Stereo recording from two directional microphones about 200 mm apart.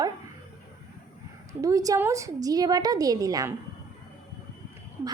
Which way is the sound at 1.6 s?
15° right (ahead or behind).